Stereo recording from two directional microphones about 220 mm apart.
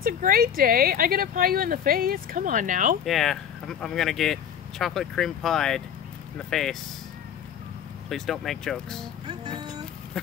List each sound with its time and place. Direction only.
0.0 s speech: 40° right (ahead or behind)
3.1 s speech: centre (ahead or behind)
8.1 s speech: centre (ahead or behind)
9.3 s speech: 20° right (ahead or behind)
10.1 s pig: 5° left (ahead or behind)